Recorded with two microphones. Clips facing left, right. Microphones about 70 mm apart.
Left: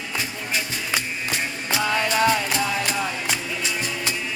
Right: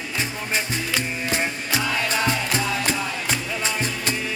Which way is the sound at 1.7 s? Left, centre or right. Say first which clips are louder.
Left 3 dB; left.